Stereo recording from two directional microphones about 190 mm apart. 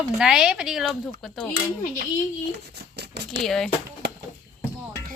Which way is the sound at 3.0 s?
60° right (ahead or behind).